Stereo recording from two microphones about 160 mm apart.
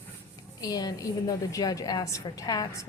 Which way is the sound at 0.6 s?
25° left (ahead or behind).